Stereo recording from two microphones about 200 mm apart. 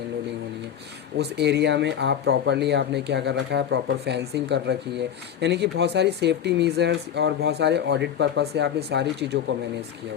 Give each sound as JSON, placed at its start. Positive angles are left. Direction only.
{"t": 1.2, "sound": "speech", "side_deg": -55}